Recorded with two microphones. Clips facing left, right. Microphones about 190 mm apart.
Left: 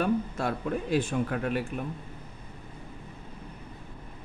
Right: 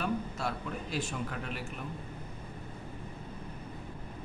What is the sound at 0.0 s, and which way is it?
Speech, 50° left (ahead or behind).